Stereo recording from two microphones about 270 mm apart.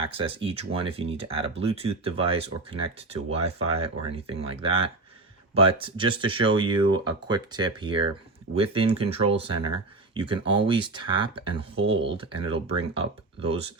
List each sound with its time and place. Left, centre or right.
0.0 s speech: centre